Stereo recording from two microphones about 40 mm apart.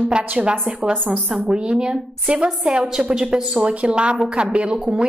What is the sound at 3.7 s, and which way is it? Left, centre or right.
A woman's voice, right.